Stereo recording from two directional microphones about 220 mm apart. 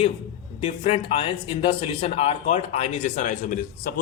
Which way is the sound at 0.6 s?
25° left (ahead or behind).